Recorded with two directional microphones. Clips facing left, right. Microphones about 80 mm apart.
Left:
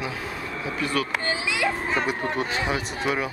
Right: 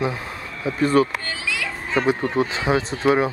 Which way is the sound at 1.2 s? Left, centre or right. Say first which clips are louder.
Left 3 dB; left.